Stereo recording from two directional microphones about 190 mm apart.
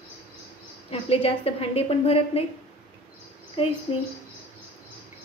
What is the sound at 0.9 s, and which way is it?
A woman's voice, 30° left (ahead or behind).